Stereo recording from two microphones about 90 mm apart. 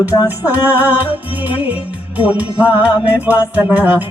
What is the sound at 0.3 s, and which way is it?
Music, 20° right (ahead or behind).